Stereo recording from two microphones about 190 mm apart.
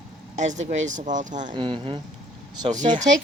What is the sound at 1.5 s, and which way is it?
Speech, 25° right (ahead or behind).